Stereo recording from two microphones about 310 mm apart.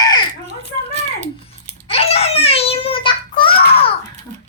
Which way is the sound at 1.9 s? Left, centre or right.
Centre.